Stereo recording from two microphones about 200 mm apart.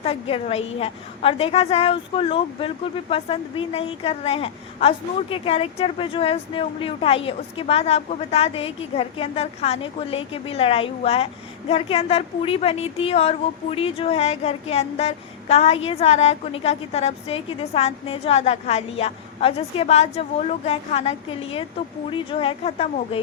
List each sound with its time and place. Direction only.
0.0 s a woman's voice: 30° left (ahead or behind)